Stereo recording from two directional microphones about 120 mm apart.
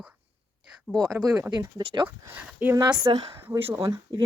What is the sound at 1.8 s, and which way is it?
Speech, 50° right (ahead or behind).